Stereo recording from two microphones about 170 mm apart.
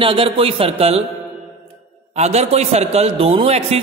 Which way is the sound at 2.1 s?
40° right (ahead or behind).